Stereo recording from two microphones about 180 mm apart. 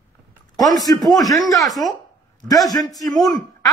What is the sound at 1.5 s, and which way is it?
Speech, centre (ahead or behind).